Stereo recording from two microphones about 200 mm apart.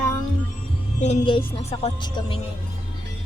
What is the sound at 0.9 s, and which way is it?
Speech, 35° left (ahead or behind).